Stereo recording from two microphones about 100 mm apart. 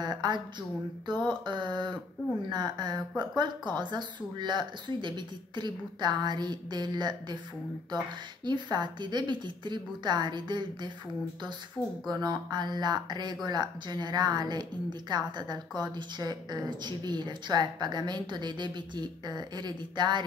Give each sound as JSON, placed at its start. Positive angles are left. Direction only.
{"t": 0.0, "sound": "a sound", "side_deg": -45}
{"t": 1.0, "sound": "speech", "side_deg": -50}
{"t": 8.5, "sound": "speech", "side_deg": -45}
{"t": 11.8, "sound": "speech", "side_deg": 10}
{"t": 12.1, "sound": "speech", "side_deg": -40}